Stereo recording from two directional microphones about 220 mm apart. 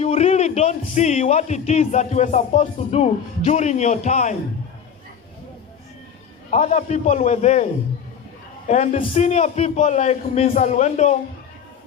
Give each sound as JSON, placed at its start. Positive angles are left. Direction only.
{"t": 0.0, "sound": "speech", "side_deg": 30}
{"t": 6.5, "sound": "speech", "side_deg": 30}